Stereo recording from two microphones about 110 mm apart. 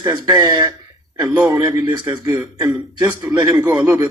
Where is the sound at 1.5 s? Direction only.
40° right (ahead or behind).